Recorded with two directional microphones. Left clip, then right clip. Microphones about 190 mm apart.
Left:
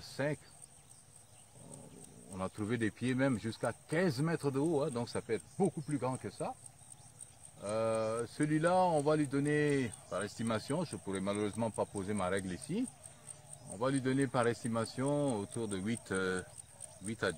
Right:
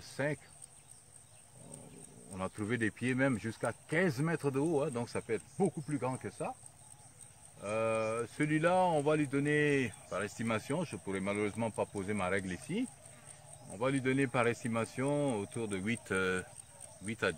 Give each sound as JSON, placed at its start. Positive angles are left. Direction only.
{"t": 0.0, "sound": "cricket", "side_deg": -10}
{"t": 2.3, "sound": "speech", "side_deg": -10}
{"t": 7.6, "sound": "speech", "side_deg": -15}